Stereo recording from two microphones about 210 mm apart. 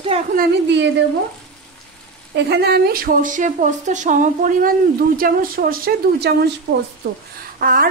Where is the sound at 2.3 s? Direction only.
55° right (ahead or behind).